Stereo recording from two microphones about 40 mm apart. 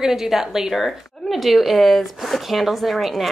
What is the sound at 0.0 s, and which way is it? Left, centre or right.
Speech, centre.